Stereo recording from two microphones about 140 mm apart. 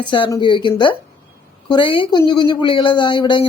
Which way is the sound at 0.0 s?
35° left (ahead or behind).